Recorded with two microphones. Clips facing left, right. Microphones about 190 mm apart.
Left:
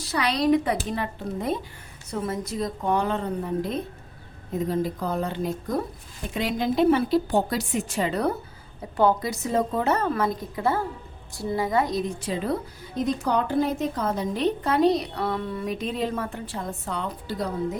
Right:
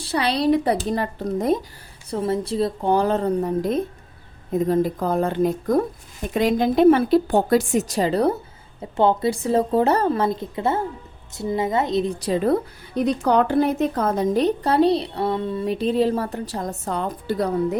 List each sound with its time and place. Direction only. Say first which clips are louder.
0.0 s a woman's voice: right 3 dB; 30° right (ahead or behind)
2.0 s a woman's voice: right 6 dB; 30° right (ahead or behind)
12.2 s a woman's voice: right 7 dB; 45° right (ahead or behind)
12.9 s a woman's voice: right 5 dB; 65° right (ahead or behind)